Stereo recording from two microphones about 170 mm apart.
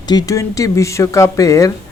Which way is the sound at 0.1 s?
20° left (ahead or behind).